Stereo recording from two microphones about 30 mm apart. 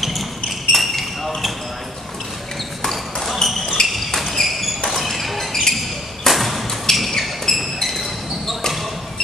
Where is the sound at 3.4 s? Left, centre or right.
Centre.